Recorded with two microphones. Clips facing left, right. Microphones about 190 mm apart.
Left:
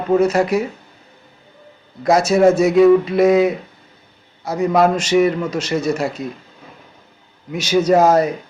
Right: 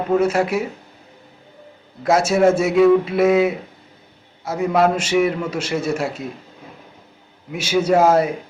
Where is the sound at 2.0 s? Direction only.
5° right (ahead or behind).